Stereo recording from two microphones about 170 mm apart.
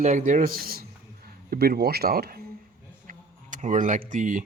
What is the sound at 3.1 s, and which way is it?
Speech, 50° right (ahead or behind).